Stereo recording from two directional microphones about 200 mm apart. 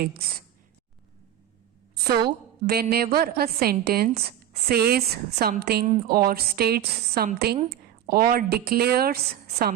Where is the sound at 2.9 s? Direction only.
50° right (ahead or behind).